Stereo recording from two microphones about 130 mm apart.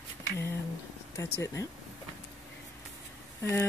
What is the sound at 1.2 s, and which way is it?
Speech, 25° left (ahead or behind).